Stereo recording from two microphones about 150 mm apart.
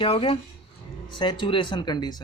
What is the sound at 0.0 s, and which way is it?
Speech, 35° left (ahead or behind).